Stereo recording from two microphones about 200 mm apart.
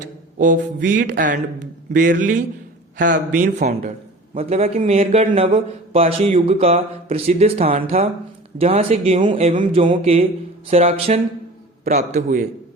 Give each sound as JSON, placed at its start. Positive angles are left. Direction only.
{"t": 0.0, "sound": "a man's voice", "side_deg": -40}
{"t": 4.4, "sound": "a man's voice", "side_deg": -30}
{"t": 9.5, "sound": "a man's voice", "side_deg": -40}